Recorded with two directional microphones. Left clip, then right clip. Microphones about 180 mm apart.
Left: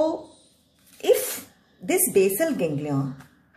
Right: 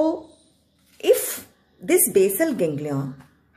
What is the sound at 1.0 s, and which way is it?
Sneeze, 25° right (ahead or behind).